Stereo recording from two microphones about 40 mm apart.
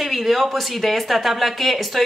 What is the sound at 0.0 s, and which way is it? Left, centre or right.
Speech, centre.